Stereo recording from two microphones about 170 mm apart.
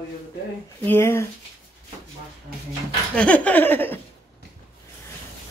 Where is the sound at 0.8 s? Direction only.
15° left (ahead or behind).